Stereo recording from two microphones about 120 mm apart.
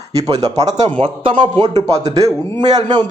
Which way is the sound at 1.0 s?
45° right (ahead or behind).